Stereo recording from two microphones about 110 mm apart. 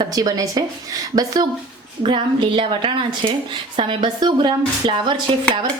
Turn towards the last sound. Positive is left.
turn(degrees=-50)  # may be behind; listen again after turning